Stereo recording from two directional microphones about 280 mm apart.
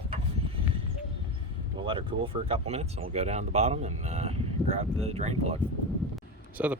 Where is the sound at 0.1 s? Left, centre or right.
Centre.